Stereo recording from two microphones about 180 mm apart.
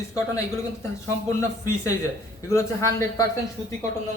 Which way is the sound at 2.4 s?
15° left (ahead or behind).